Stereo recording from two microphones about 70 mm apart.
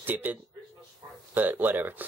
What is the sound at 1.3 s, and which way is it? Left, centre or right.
Speech, right.